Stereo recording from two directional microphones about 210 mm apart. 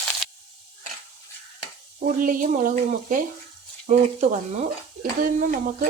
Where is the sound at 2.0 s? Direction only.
40° right (ahead or behind).